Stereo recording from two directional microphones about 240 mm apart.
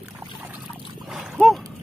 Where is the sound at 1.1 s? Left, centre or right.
Centre.